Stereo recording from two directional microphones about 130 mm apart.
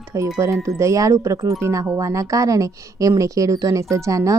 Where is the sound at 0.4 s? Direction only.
25° right (ahead or behind).